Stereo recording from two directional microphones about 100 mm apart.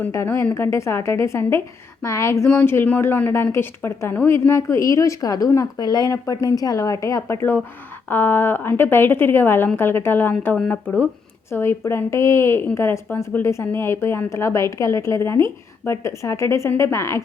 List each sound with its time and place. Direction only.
0.1 s speech: 25° left (ahead or behind)